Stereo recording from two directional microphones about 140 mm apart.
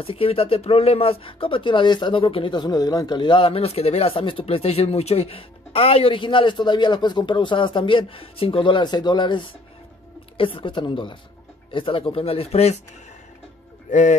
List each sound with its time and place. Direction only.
0.0 s speech: 45° left (ahead or behind)
13.8 s speech: 60° left (ahead or behind)